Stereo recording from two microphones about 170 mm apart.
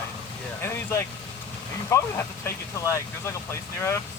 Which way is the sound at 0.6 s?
15° left (ahead or behind).